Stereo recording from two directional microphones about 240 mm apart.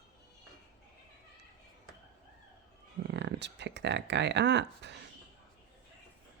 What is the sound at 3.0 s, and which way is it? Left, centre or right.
Speech, right.